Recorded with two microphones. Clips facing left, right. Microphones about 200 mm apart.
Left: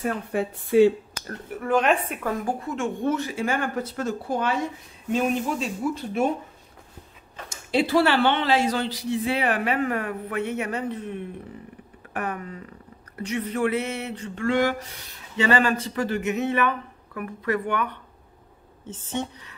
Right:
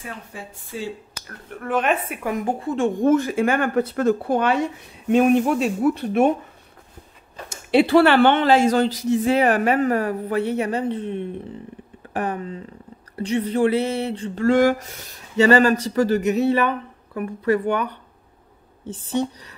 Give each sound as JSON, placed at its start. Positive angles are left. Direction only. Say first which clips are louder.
{"t": 0.0, "sound": "speech", "louder": "left 10 dB", "side_deg": 60}
{"t": 1.5, "sound": "a woman's voice", "louder": "even", "side_deg": 0}
{"t": 2.6, "sound": "a sound", "louder": "right 7 dB", "side_deg": -35}
{"t": 3.1, "sound": "speech", "louder": "right 8 dB", "side_deg": -50}
{"t": 7.4, "sound": "a man's voice", "louder": "right 6 dB", "side_deg": -65}
{"t": 13.1, "sound": "a sound", "louder": "right 6 dB", "side_deg": -30}